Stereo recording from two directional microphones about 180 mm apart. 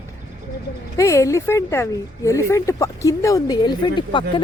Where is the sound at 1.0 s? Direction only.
15° left (ahead or behind).